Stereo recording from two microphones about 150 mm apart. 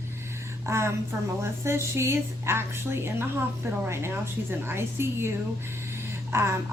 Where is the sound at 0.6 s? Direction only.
20° right (ahead or behind).